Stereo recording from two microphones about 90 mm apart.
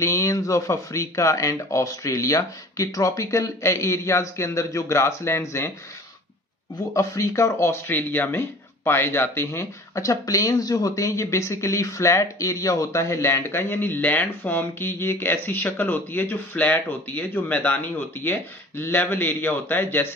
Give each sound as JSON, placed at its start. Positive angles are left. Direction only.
{"t": 0.0, "sound": "speech", "side_deg": 35}
{"t": 6.9, "sound": "speech", "side_deg": 35}